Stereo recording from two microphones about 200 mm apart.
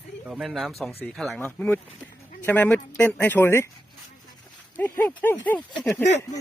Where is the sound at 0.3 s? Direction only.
5° right (ahead or behind); by 3.7 s 10° left (ahead or behind).